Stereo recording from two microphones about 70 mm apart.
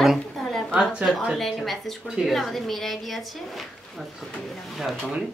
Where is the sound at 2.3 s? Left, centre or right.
Centre.